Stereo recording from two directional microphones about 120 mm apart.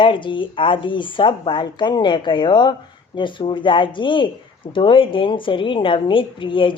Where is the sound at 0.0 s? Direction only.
45° left (ahead or behind).